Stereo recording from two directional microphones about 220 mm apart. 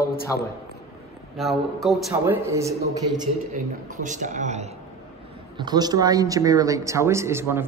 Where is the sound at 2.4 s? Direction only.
15° right (ahead or behind).